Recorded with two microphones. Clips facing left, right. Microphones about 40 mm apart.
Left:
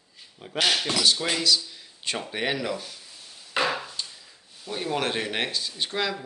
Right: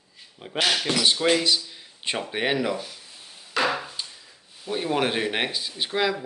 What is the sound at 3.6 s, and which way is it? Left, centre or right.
Wood, centre.